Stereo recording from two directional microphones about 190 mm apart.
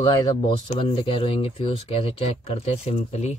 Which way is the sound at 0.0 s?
25° left (ahead or behind).